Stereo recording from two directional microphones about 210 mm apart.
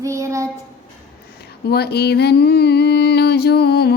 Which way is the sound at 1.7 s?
50° left (ahead or behind).